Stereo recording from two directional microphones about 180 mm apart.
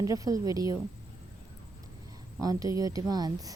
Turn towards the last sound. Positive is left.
turn(degrees=-20)  # may be behind; listen again after turning